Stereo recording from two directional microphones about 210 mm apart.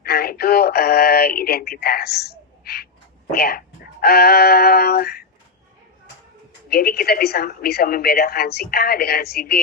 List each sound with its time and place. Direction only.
0.0 s speech: 45° left (ahead or behind)
6.7 s speech: 45° left (ahead or behind)